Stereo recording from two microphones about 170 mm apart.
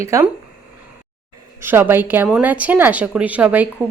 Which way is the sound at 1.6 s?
15° right (ahead or behind).